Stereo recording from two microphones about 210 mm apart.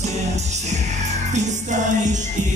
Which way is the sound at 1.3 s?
35° right (ahead or behind).